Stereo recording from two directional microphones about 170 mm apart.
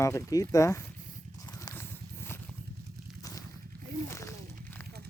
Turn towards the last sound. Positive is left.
turn(degrees=15)  # may be behind; listen again after turning